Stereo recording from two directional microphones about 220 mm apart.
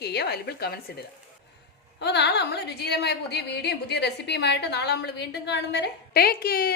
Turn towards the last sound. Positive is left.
turn(degrees=45)  # may be behind; listen again after turning